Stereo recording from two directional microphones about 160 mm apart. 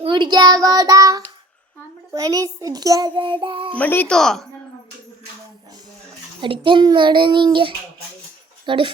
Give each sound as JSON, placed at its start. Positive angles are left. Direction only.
{"t": 0.0, "sound": "child singing", "side_deg": -30}
{"t": 2.1, "sound": "a child's voice", "side_deg": -20}
{"t": 3.4, "sound": "child singing", "side_deg": -30}
{"t": 3.8, "sound": "speech", "side_deg": 10}
{"t": 6.4, "sound": "a child's voice", "side_deg": -30}